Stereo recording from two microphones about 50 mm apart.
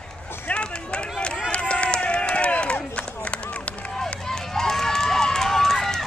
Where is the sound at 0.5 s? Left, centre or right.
Left.